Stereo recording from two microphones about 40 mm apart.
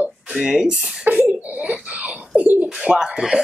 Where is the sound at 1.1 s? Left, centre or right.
Right.